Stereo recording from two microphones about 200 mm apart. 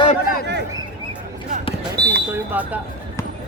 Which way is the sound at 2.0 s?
20° right (ahead or behind).